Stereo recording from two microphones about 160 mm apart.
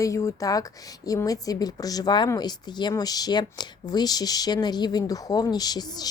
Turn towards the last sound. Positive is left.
turn(degrees=25)  # may be behind; listen again after turning